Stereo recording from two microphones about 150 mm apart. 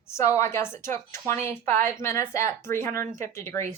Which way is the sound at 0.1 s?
20° left (ahead or behind).